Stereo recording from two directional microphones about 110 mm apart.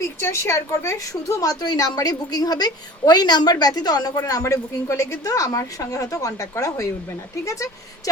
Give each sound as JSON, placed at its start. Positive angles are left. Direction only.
{"t": 0.2, "sound": "a woman's voice", "side_deg": 25}